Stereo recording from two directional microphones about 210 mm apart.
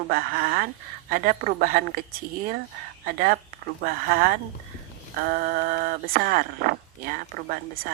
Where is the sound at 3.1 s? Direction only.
45° right (ahead or behind).